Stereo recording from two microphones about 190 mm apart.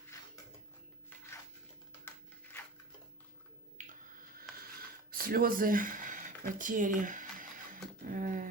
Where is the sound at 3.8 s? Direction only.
40° right (ahead or behind).